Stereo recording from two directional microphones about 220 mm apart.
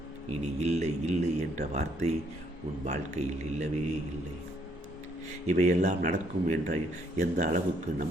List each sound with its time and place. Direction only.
0.6 s speech: 30° right (ahead or behind)
5.5 s speech: 30° right (ahead or behind)